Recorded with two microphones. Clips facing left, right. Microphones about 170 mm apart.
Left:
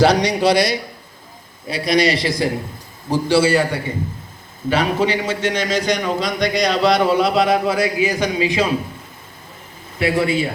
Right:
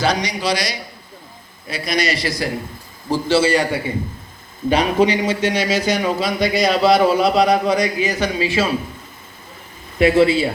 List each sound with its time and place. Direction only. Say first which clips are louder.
0.0 s a man's voice: left 6 dB; 70° left (ahead or behind)
1.7 s a man's voice: left 4 dB; 30° left (ahead or behind)
3.1 s a man's voice: left 1 dB; 15° left (ahead or behind)
4.7 s a man's voice: right 2 dB; 15° right (ahead or behind); by 8.6 s 15° left (ahead or behind)
10.0 s speech: right 5 dB; 25° right (ahead or behind)